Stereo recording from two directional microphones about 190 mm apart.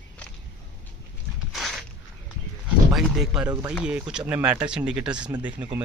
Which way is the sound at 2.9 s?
Centre (ahead or behind).